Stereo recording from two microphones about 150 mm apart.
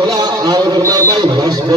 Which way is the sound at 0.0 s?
25° right (ahead or behind).